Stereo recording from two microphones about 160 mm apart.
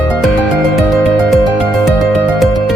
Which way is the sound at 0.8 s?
Centre (ahead or behind).